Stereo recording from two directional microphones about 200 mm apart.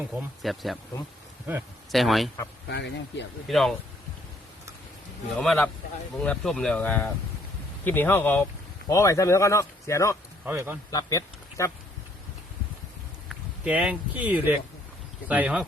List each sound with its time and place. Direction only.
0.0 s speech: 5° right (ahead or behind)
2.6 s speech: 60° left (ahead or behind)
3.5 s speech: centre (ahead or behind)
5.4 s speech: 5° left (ahead or behind)
10.4 s speech: 10° right (ahead or behind)
10.9 s speech: 15° left (ahead or behind)
13.2 s speech: 5° right (ahead or behind)